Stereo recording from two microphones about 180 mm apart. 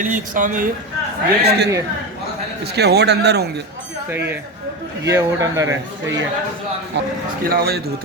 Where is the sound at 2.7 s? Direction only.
65° right (ahead or behind).